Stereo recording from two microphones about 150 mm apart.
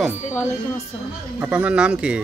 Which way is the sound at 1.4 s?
10° right (ahead or behind).